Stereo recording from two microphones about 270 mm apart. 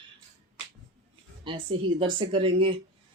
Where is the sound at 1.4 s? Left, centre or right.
Centre.